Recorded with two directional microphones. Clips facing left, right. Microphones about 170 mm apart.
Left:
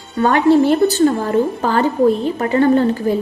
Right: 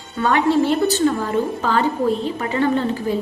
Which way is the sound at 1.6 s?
45° left (ahead or behind).